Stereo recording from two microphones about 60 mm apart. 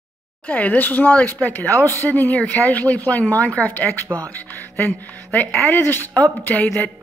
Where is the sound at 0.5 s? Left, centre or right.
Left.